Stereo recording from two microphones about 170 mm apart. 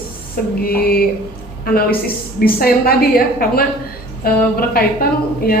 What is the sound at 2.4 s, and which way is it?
Speech, 60° left (ahead or behind).